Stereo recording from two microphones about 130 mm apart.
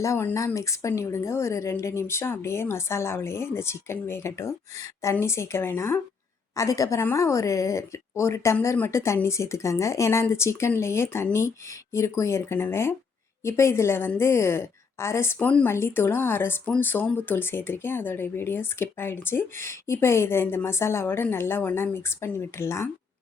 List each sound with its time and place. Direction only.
0.0 s speech: 20° left (ahead or behind)